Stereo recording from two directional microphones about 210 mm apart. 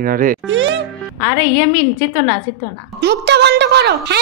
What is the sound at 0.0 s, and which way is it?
Speech, 40° right (ahead or behind).